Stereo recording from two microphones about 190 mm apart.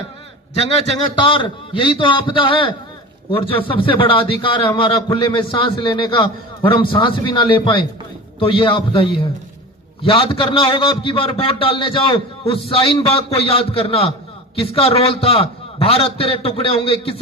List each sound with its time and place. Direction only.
0.5 s a man's voice: 35° left (ahead or behind)